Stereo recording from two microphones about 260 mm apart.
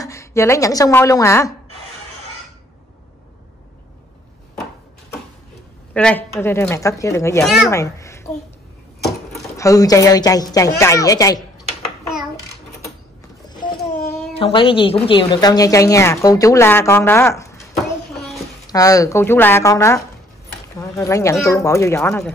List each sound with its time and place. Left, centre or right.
0.0 s speech: centre
5.9 s speech: centre
7.4 s speech: centre
7.7 s a sound: centre
9.6 s speech: centre
13.5 s a sound: centre
14.4 s speech: left
18.7 s speech: centre